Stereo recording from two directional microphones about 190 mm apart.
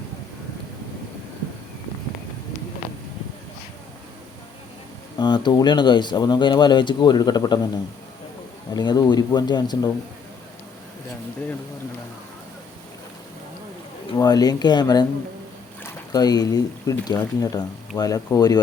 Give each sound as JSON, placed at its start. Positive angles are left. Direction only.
{"t": 5.1, "sound": "speech", "side_deg": 25}
{"t": 8.7, "sound": "speech", "side_deg": 20}
{"t": 14.1, "sound": "speech", "side_deg": 20}